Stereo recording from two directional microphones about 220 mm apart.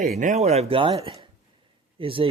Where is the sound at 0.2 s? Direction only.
35° right (ahead or behind).